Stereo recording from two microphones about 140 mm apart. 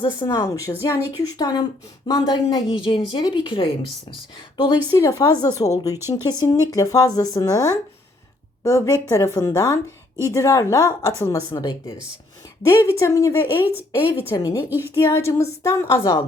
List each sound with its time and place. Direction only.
0.0 s speech: 30° left (ahead or behind)
12.6 s a woman's voice: 20° left (ahead or behind)
14.7 s a woman's voice: 15° right (ahead or behind)
14.9 s speech: 20° left (ahead or behind)